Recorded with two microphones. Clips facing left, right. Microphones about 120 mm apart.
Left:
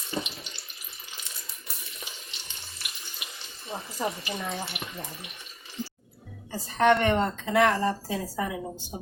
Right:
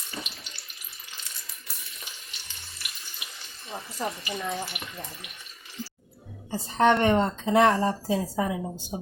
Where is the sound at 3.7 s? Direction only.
10° left (ahead or behind).